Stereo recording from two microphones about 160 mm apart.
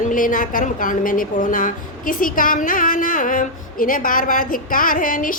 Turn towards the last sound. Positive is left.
turn(degrees=60)  # may be behind; listen again after turning